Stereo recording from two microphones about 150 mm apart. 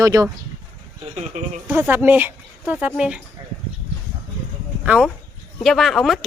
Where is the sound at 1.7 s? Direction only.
15° right (ahead or behind).